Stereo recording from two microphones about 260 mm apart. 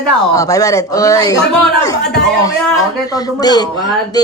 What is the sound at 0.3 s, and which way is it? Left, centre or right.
A woman's voice, centre.